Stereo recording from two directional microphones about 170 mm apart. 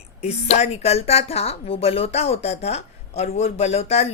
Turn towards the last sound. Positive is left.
turn(degrees=40)  # may be behind; listen again after turning